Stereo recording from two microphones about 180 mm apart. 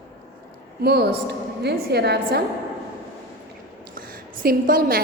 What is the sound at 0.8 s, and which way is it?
A woman's voice, 60° right (ahead or behind).